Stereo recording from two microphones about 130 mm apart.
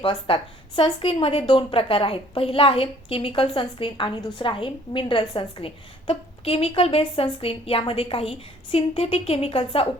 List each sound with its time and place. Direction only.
0.0 s a woman's voice: 45° left (ahead or behind)